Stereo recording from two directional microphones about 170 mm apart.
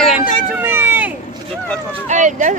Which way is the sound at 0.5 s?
15° right (ahead or behind).